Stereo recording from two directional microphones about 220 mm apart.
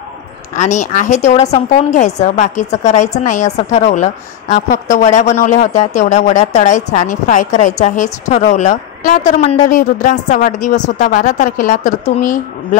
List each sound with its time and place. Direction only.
0.6 s a woman's voice: 35° left (ahead or behind)